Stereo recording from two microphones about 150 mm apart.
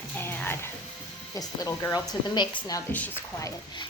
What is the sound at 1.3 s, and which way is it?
A child's voice, 25° left (ahead or behind).